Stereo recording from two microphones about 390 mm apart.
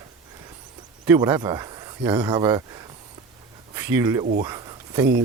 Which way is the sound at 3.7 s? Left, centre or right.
Centre.